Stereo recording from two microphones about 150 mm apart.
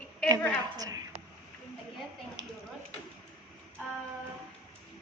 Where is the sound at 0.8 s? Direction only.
25° right (ahead or behind).